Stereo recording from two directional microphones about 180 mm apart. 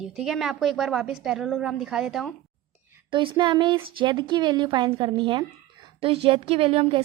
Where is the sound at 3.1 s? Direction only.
25° right (ahead or behind).